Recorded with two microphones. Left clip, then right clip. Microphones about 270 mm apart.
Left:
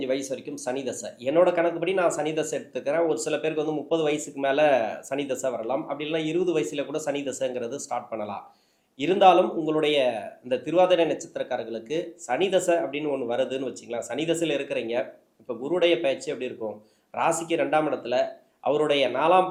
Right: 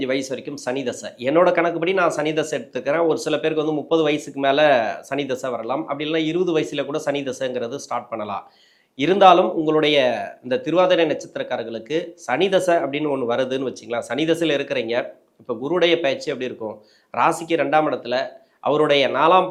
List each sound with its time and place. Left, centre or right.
0.0 s speech: right